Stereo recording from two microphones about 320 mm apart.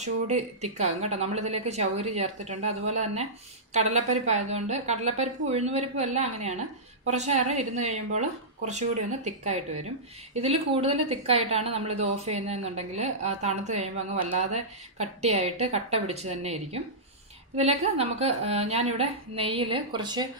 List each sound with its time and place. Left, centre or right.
0.0 s speech: right